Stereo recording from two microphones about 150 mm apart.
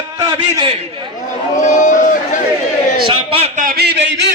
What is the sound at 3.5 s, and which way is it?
Speech, 75° right (ahead or behind).